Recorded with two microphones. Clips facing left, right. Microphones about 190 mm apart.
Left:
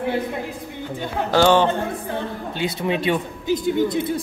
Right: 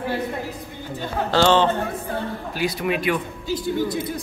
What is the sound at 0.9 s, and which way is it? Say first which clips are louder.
Speech: left 1 dB; 15° left (ahead or behind).